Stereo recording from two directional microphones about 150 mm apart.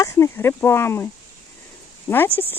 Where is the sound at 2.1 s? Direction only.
15° left (ahead or behind).